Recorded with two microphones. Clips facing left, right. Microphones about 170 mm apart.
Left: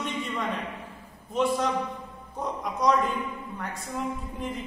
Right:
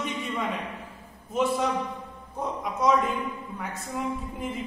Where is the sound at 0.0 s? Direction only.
Centre (ahead or behind).